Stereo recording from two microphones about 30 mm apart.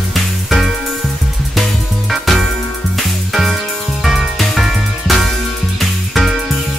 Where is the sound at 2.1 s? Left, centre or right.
Centre.